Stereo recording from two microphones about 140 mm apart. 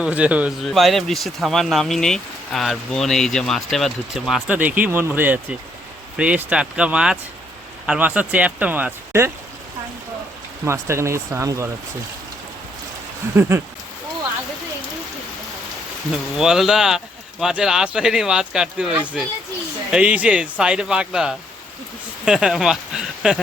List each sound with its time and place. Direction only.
0.0 s speech: 10° right (ahead or behind)
10.7 s speech: 20° right (ahead or behind)
16.4 s speech: 5° right (ahead or behind)